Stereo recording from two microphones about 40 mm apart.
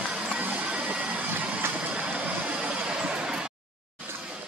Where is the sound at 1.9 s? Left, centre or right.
Right.